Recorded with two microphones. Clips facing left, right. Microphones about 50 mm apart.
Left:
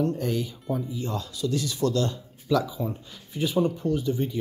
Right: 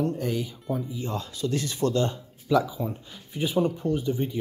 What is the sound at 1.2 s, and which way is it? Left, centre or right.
Speech, right.